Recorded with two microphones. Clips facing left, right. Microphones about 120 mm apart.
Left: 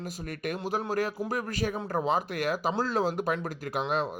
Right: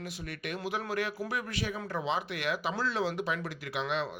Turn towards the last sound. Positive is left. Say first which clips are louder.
# left 4 dB
turn(degrees=45)  # may be behind; listen again after turning